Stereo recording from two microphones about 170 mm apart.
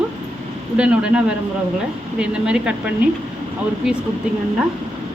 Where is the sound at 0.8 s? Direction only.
5° right (ahead or behind).